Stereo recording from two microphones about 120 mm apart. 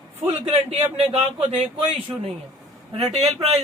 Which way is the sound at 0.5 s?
55° right (ahead or behind).